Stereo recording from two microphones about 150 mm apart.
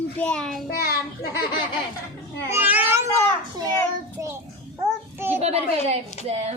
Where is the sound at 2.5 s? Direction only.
15° right (ahead or behind).